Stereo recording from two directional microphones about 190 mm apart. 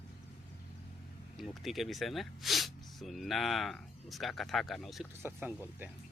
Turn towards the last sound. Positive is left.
turn(degrees=-10)  # may be behind; listen again after turning